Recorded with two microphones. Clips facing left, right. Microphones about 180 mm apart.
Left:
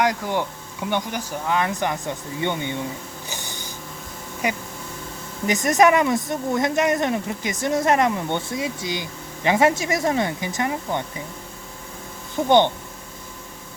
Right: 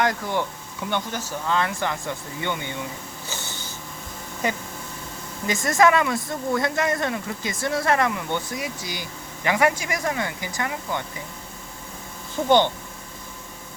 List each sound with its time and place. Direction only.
0.0 s speech: 15° left (ahead or behind)
3.2 s a sound: 15° left (ahead or behind)
4.4 s speech: 15° left (ahead or behind)
12.5 s speech: 20° left (ahead or behind)